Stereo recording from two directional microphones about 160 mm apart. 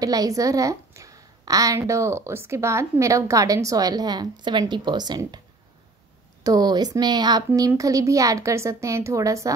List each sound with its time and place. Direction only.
0.0 s a woman's voice: 20° right (ahead or behind)
6.4 s a woman's voice: 25° right (ahead or behind)